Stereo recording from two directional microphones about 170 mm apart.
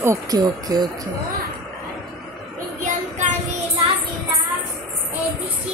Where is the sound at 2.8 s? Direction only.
45° right (ahead or behind).